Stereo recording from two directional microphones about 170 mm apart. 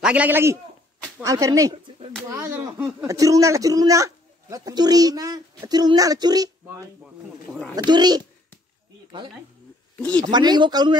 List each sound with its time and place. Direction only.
0.0 s a man's voice: 10° right (ahead or behind); by 8.2 s 25° right (ahead or behind)
10.3 s speech: 25° right (ahead or behind)